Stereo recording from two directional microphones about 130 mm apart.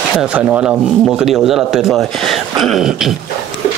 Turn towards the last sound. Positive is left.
turn(degrees=0)  # may be behind; listen again after turning